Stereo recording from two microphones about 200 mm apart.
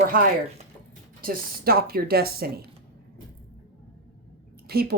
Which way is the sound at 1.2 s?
50° right (ahead or behind).